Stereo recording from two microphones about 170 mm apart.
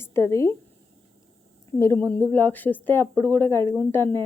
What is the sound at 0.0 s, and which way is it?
Speech, 15° left (ahead or behind).